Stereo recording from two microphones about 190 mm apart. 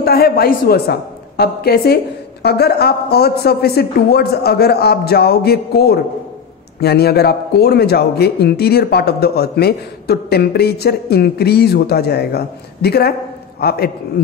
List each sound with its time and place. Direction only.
0.0 s a man's voice: 55° left (ahead or behind)